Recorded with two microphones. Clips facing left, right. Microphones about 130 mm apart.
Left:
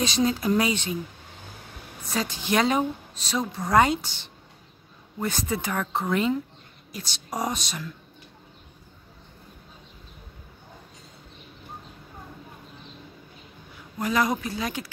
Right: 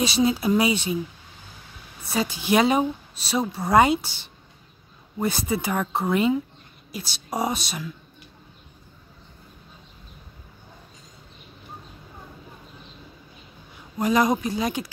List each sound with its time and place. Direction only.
0.0 s speech: 10° right (ahead or behind)
2.0 s speech: 10° right (ahead or behind)
13.9 s speech: 20° right (ahead or behind)